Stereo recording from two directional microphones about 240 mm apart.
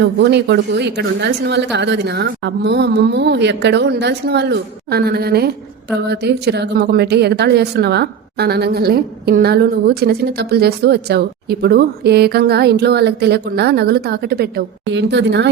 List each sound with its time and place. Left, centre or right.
0.0 s a woman's voice: right